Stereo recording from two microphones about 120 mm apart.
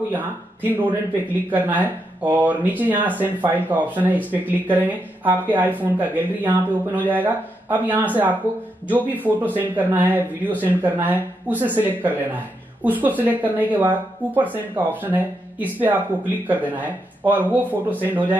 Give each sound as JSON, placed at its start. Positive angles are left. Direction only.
{"t": 0.1, "sound": "speech", "side_deg": -15}
{"t": 17.6, "sound": "speech", "side_deg": 15}
{"t": 18.0, "sound": "speech", "side_deg": -15}